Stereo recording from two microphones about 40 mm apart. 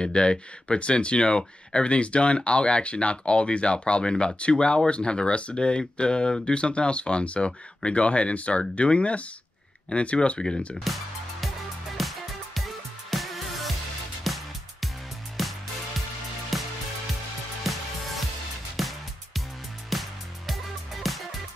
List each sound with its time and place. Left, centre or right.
0.0 s speech: left
10.9 s speech: centre
12.0 s music: centre